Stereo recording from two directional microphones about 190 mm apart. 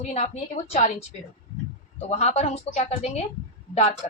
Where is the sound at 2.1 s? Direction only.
35° left (ahead or behind).